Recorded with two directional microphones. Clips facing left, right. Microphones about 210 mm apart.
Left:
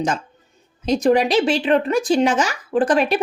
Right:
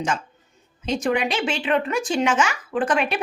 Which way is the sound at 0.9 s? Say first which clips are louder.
Left 6 dB; 35° left (ahead or behind).